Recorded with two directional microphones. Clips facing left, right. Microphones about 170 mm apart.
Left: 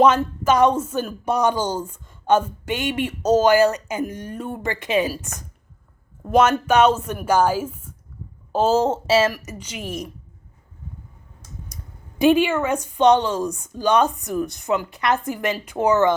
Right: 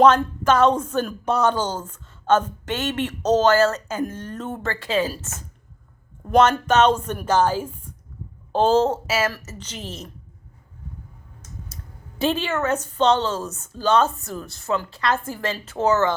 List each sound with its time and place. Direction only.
0.0 s speech: 10° left (ahead or behind)
8.9 s a woman's voice: 25° left (ahead or behind)
9.3 s speech: 15° left (ahead or behind)
11.7 s a sound: 15° left (ahead or behind)
12.2 s speech: 15° left (ahead or behind)